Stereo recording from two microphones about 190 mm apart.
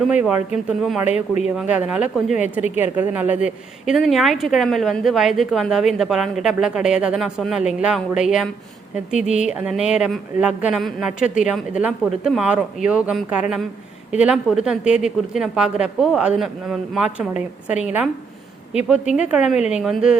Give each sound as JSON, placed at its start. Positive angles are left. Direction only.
{"t": 0.0, "sound": "a woman's voice", "side_deg": -5}
{"t": 2.3, "sound": "a woman's voice", "side_deg": 35}
{"t": 2.7, "sound": "a woman's voice", "side_deg": -10}